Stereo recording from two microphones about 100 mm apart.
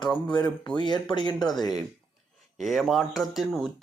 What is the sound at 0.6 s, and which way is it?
Speech, 50° left (ahead or behind).